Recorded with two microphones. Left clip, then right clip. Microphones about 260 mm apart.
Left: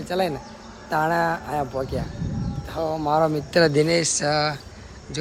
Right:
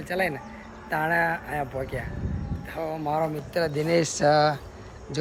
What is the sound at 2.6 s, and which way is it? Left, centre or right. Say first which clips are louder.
Speech: left 5 dB; centre.